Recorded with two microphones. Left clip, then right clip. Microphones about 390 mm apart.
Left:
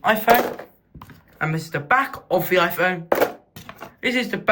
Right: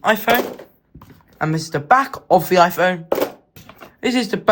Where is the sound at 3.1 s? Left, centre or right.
Centre.